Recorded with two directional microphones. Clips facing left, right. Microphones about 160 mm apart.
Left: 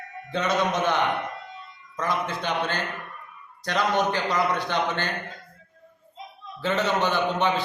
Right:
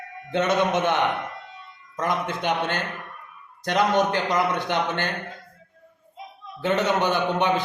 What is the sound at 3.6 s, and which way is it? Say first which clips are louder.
A man's voice: right 3 dB; 20° right (ahead or behind).